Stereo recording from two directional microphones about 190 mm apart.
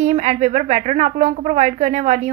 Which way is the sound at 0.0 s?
35° right (ahead or behind).